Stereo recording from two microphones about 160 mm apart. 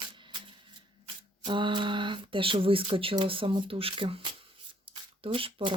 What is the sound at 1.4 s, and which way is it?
Speech, 30° right (ahead or behind).